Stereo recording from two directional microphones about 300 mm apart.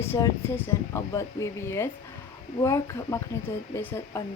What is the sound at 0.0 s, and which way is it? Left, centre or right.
A woman's voice, centre.